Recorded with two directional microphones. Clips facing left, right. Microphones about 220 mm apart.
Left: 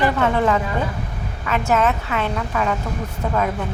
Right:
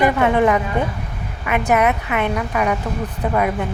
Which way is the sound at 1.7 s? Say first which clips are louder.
Right 2 dB; 15° right (ahead or behind).